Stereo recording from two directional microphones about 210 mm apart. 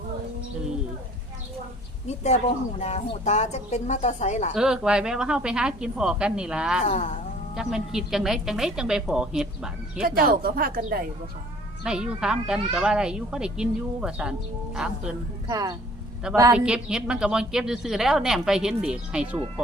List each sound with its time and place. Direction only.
2.8 s a woman's voice: 30° left (ahead or behind)
4.5 s a woman's voice: 5° right (ahead or behind)
10.0 s speech: 45° right (ahead or behind)
11.8 s a woman's voice: 5° right (ahead or behind)
15.4 s a woman's voice: 15° right (ahead or behind)